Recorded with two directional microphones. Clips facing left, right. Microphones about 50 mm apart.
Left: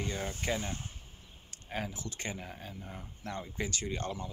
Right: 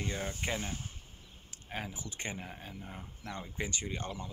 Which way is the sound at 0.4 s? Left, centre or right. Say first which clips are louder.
Left 2 dB; centre.